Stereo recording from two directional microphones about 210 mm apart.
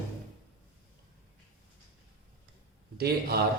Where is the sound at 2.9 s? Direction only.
50° right (ahead or behind).